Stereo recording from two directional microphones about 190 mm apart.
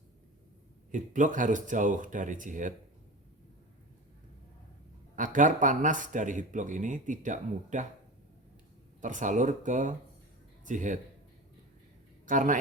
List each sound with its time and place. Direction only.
0.9 s speech: 40° right (ahead or behind)
5.1 s speech: 45° right (ahead or behind)
9.0 s speech: 40° right (ahead or behind)
12.2 s a man's voice: 45° right (ahead or behind)